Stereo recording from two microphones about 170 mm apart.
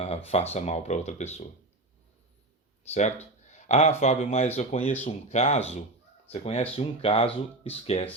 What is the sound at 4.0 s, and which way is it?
Speech, 40° left (ahead or behind).